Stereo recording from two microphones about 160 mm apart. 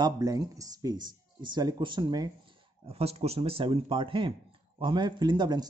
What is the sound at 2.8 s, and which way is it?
A man's voice, 40° right (ahead or behind).